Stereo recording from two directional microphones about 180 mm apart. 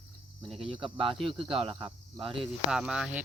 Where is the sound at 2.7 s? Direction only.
5° right (ahead or behind).